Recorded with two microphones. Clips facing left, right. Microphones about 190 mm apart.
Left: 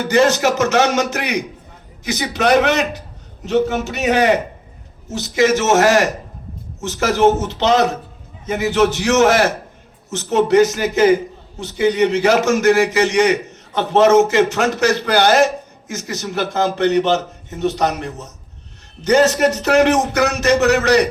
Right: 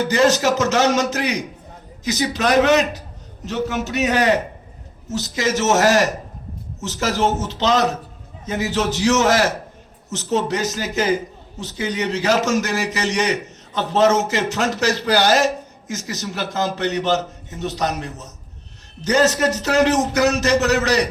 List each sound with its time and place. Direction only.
0.1 s a man's voice: 55° left (ahead or behind)